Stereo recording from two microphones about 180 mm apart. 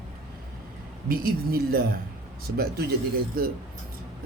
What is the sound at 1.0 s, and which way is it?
Speech, 55° right (ahead or behind).